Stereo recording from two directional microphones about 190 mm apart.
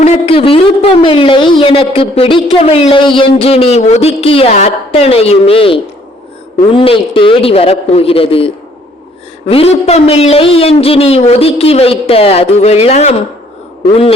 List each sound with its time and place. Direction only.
0.0 s a man's voice: 30° left (ahead or behind)